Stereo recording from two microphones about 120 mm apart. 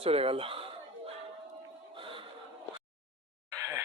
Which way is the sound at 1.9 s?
45° right (ahead or behind).